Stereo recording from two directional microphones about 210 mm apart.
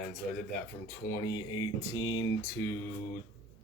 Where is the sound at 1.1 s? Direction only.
15° left (ahead or behind).